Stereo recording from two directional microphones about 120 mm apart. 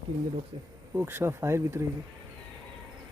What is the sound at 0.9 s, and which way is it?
Speech, 20° right (ahead or behind).